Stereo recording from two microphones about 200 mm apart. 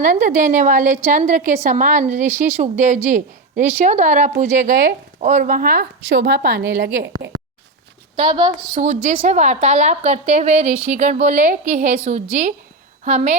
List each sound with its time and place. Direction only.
0.0 s a woman's voice: 40° right (ahead or behind)
6.1 s a woman's voice: 60° right (ahead or behind)
8.1 s a woman's voice: 35° right (ahead or behind)